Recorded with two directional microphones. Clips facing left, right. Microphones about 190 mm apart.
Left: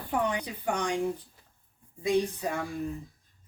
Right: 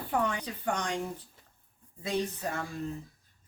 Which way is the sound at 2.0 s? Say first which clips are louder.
Left 5 dB; 15° left (ahead or behind).